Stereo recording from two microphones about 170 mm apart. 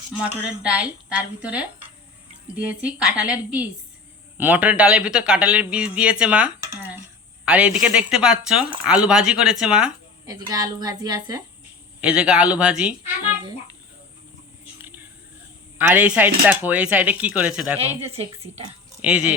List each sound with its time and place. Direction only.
0.4 s a man's voice: 5° right (ahead or behind)
10.2 s a woman's voice: 20° right (ahead or behind)
11.9 s a man's voice: 5° right (ahead or behind)
14.8 s a sound: 10° right (ahead or behind)
15.8 s a man's voice: 10° right (ahead or behind)
17.7 s a woman's voice: 35° right (ahead or behind)
19.0 s a man's voice: 5° right (ahead or behind)